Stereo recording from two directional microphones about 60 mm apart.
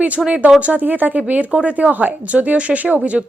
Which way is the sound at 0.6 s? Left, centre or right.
Right.